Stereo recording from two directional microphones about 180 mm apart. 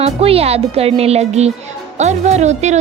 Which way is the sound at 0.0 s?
35° right (ahead or behind).